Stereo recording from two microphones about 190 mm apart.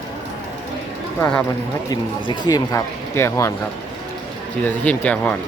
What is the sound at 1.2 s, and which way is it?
Speech, 10° left (ahead or behind).